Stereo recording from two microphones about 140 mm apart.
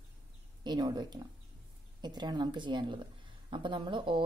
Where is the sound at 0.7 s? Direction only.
30° right (ahead or behind).